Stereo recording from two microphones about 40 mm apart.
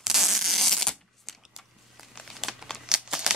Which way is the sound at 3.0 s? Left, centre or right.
Centre.